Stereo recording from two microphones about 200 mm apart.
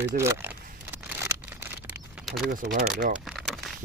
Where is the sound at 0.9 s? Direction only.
10° right (ahead or behind).